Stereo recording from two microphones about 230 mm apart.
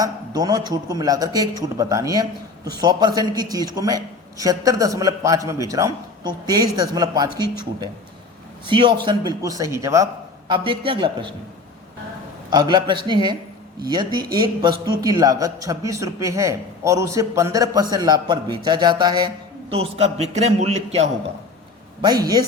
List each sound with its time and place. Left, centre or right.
0.0 s a man's voice: centre
8.6 s a man's voice: right
12.5 s a man's voice: centre
22.0 s a man's voice: centre